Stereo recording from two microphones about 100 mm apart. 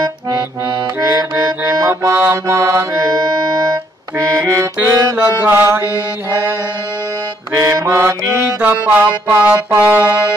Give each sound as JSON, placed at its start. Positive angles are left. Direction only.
{"t": 1.0, "sound": "music", "side_deg": -30}
{"t": 7.5, "sound": "music", "side_deg": -30}